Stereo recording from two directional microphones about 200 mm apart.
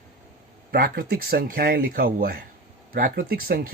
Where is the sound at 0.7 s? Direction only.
45° right (ahead or behind).